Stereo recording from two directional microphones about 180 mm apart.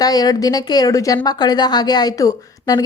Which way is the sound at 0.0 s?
20° left (ahead or behind).